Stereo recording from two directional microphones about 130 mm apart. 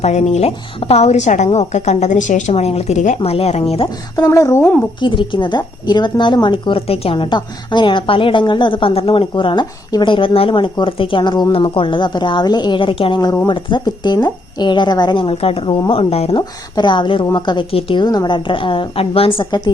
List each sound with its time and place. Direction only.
0.0 s a woman's voice: 60° left (ahead or behind)
2.5 s a woman's voice: 55° left (ahead or behind)
3.2 s speech: 50° left (ahead or behind)
4.2 s speech: 25° left (ahead or behind)
4.6 s a woman's voice: 10° left (ahead or behind)
4.9 s a woman's voice: 40° left (ahead or behind)
16.4 s a woman's voice: 35° left (ahead or behind)
19.5 s a woman's voice: 35° left (ahead or behind)